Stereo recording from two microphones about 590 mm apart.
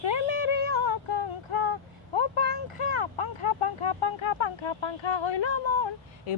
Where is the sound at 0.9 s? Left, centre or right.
Right.